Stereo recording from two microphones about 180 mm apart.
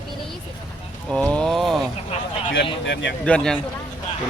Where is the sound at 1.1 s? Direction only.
5° left (ahead or behind).